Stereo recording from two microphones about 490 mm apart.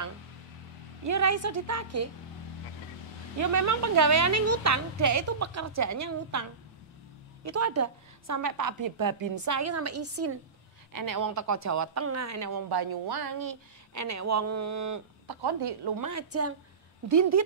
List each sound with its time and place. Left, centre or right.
1.0 s a woman's voice: right
3.3 s a woman's voice: right
7.4 s a woman's voice: right
10.9 s a woman's voice: right
15.4 s a woman's voice: right
16.1 s a woman's voice: right